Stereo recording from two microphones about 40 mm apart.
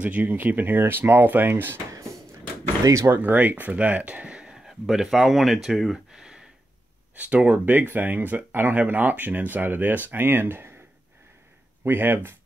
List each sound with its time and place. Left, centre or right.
0.0 s speech: right
3.1 s speech: right
4.6 s speech: centre
7.2 s speech: right
11.8 s speech: right